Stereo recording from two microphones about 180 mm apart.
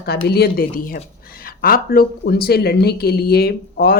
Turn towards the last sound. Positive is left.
turn(degrees=60)  # may be behind; listen again after turning